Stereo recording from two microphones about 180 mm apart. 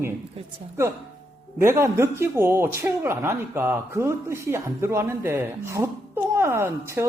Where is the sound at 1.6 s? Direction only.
15° right (ahead or behind).